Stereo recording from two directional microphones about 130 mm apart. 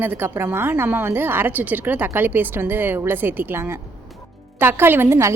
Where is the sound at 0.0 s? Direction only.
15° right (ahead or behind).